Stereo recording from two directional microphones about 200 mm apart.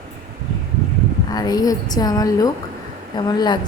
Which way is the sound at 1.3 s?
20° left (ahead or behind).